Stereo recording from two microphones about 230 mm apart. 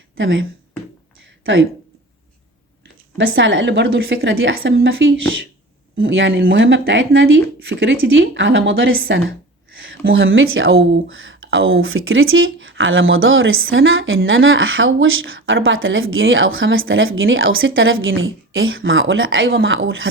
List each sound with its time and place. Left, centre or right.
0.2 s speech: right
3.2 s speech: right